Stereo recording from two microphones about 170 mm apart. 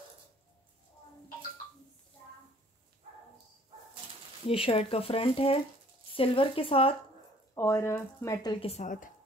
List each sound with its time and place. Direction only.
4.5 s speech: 35° left (ahead or behind)
7.5 s speech: 15° left (ahead or behind)
8.6 s speech: 45° left (ahead or behind)